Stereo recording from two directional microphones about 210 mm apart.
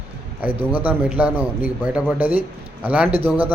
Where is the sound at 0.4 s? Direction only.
10° right (ahead or behind).